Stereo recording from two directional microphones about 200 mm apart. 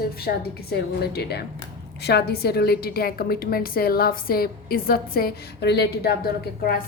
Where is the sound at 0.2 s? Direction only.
50° left (ahead or behind).